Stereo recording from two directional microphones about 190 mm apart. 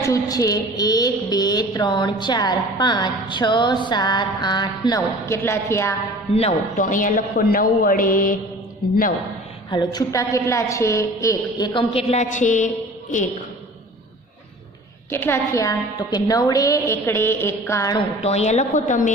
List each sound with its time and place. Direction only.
0.0 s a woman's voice: 20° left (ahead or behind)
6.3 s a man's voice: 40° left (ahead or behind)
9.6 s a woman's voice: 20° left (ahead or behind); by 13.2 s 40° left (ahead or behind)
15.1 s a woman's voice: 10° left (ahead or behind)
18.2 s a woman's voice: 35° left (ahead or behind)